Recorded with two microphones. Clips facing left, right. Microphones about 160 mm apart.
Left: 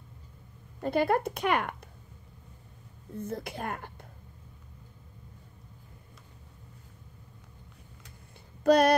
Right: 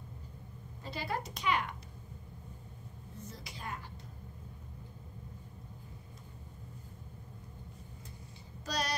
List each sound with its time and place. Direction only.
0.7 s speech: 55° left (ahead or behind)
3.2 s speech: 55° left (ahead or behind)
8.6 s speech: 55° left (ahead or behind)